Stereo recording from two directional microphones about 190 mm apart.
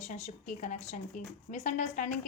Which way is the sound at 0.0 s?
40° left (ahead or behind).